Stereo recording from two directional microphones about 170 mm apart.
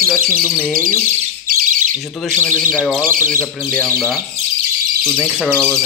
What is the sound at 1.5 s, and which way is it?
Bird, 50° right (ahead or behind).